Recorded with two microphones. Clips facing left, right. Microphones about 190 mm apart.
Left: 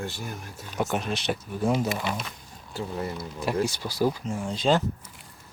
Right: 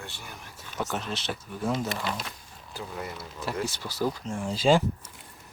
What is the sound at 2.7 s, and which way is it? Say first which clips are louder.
Speech: left 5 dB; 30° left (ahead or behind).